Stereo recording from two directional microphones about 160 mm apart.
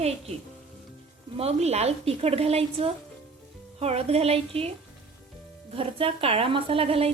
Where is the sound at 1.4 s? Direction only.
40° right (ahead or behind).